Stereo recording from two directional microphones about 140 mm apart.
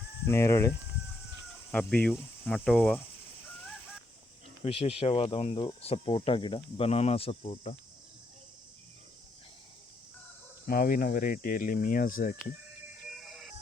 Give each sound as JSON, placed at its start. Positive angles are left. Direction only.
{"t": 0.3, "sound": "speech", "side_deg": 20}
{"t": 1.7, "sound": "cricket", "side_deg": 10}
{"t": 4.6, "sound": "speech", "side_deg": 45}
{"t": 10.7, "sound": "speech", "side_deg": 90}
{"t": 13.1, "sound": "music", "side_deg": -5}